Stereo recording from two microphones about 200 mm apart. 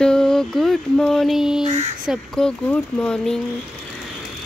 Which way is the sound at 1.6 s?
35° right (ahead or behind).